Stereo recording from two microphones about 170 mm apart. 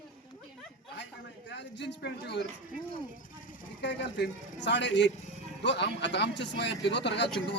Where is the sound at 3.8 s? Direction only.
90° left.